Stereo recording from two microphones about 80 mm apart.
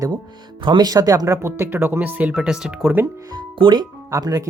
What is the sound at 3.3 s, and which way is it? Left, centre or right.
Speech, right.